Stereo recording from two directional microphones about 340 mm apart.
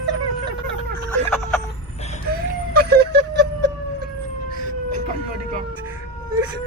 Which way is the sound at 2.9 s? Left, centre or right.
Right.